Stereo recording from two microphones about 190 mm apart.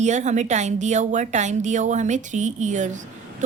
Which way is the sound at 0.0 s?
40° right (ahead or behind).